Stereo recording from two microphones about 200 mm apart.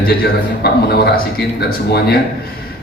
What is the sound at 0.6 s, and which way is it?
Speech, 50° left (ahead or behind).